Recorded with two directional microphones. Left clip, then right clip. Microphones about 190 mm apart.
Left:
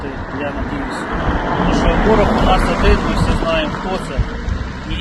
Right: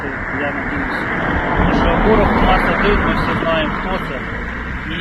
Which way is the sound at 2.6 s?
90° left.